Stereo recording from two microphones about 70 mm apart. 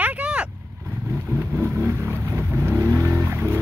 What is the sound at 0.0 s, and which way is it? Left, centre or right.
Vehicle, centre.